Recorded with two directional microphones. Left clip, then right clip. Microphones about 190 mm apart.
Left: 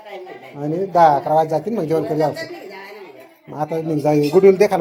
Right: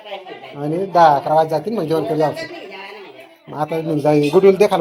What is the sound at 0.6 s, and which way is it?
Speech, 10° left (ahead or behind).